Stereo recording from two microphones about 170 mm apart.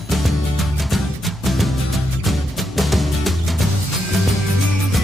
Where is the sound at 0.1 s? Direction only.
Centre (ahead or behind).